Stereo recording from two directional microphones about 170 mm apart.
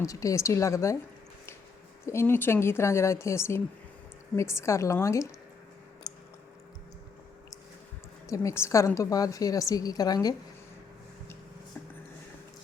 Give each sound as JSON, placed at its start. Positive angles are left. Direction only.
{"t": 0.0, "sound": "speech", "side_deg": 20}
{"t": 2.0, "sound": "speech", "side_deg": 15}
{"t": 6.0, "sound": "a sound", "side_deg": 25}
{"t": 8.3, "sound": "a woman's voice", "side_deg": 15}